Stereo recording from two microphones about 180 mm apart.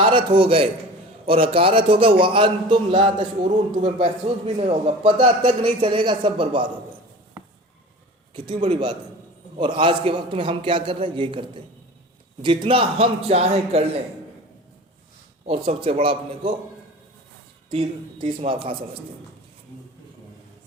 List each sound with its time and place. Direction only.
0.0 s a man's voice: 30° right (ahead or behind)
8.3 s a man's voice: 25° right (ahead or behind)
15.4 s a man's voice: 30° right (ahead or behind)
17.7 s a man's voice: 35° right (ahead or behind)